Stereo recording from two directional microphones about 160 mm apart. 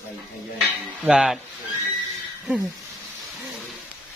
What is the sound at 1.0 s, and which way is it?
Speech, 5° right (ahead or behind).